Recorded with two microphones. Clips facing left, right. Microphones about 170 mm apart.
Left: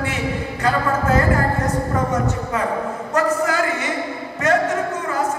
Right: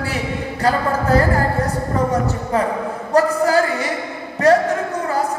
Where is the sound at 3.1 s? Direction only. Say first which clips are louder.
Right 5 dB; 35° right (ahead or behind).